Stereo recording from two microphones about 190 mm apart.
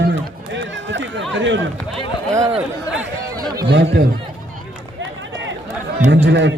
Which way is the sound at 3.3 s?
20° right (ahead or behind).